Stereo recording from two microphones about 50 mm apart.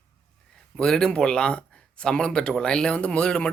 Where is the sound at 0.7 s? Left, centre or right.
Centre.